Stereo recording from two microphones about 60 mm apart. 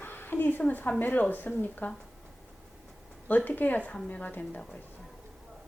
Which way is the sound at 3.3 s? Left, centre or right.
Left.